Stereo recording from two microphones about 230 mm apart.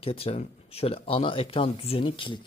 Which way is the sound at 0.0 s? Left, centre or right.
Left.